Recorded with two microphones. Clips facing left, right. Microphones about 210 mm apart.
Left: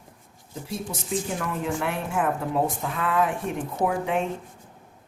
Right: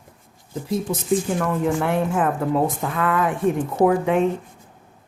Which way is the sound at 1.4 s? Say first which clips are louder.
Right 7 dB; 55° right (ahead or behind).